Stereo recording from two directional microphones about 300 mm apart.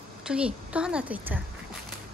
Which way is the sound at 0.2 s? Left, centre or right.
Centre.